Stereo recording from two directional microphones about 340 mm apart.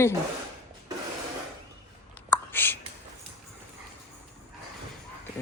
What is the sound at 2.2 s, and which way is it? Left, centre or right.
Whispering, centre.